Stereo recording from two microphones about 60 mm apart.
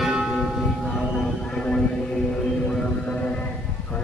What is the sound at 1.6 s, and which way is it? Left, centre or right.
Music, centre.